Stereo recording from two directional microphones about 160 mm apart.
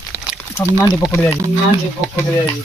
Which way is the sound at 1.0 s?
5° right (ahead or behind).